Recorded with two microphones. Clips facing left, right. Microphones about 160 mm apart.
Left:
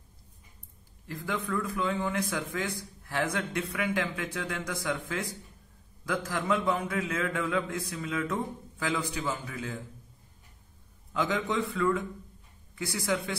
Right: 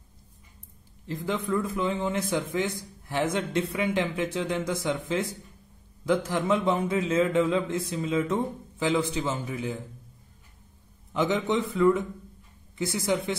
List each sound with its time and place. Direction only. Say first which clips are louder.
1.0 s speech: right 4 dB; 20° right (ahead or behind)
11.1 s speech: right 4 dB; 20° right (ahead or behind)